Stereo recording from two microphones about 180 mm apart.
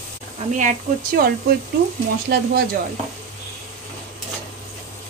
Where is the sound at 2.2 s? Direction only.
60° right (ahead or behind).